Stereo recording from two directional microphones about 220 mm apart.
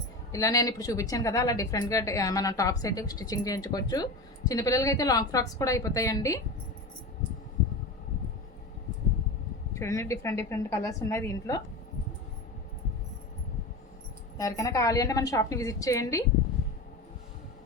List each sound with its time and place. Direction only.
0.3 s a woman's voice: 15° left (ahead or behind)
9.7 s a woman's voice: 15° left (ahead or behind)
14.3 s a woman's voice: 15° left (ahead or behind)